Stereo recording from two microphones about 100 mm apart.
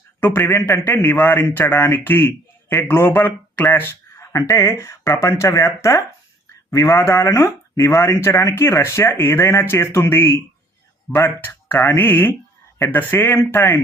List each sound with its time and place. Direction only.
0.2 s speech: 20° left (ahead or behind)